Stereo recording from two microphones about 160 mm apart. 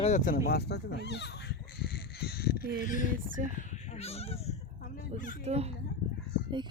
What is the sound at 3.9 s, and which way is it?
Cat, 40° left (ahead or behind).